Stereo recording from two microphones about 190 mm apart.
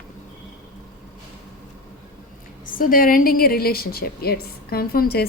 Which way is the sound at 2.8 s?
45° left (ahead or behind).